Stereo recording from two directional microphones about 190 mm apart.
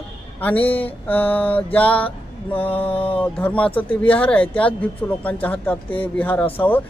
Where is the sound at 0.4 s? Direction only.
10° left (ahead or behind).